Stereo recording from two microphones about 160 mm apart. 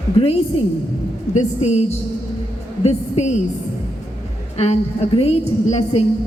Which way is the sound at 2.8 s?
45° left (ahead or behind).